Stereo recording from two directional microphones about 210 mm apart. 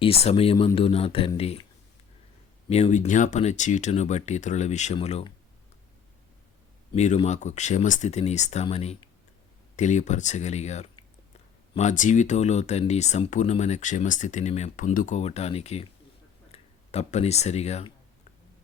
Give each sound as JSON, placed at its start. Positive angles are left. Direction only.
{"t": 0.0, "sound": "speech", "side_deg": 30}
{"t": 2.6, "sound": "speech", "side_deg": 30}
{"t": 6.9, "sound": "speech", "side_deg": 30}